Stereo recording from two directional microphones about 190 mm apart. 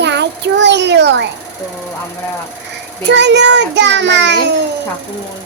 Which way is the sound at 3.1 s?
65° right (ahead or behind).